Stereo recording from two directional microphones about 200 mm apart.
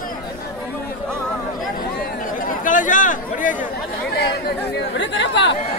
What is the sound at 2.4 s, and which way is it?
Chatter, 40° left (ahead or behind).